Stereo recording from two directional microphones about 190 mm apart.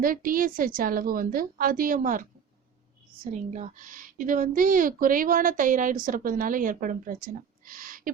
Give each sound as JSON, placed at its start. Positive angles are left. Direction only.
{"t": 0.0, "sound": "a woman's voice", "side_deg": -45}
{"t": 3.2, "sound": "a woman's voice", "side_deg": -40}